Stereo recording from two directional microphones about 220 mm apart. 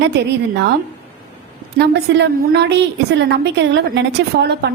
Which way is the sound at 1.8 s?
50° right (ahead or behind).